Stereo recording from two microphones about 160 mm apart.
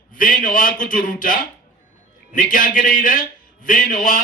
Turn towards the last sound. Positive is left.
turn(degrees=55)  # may be behind; listen again after turning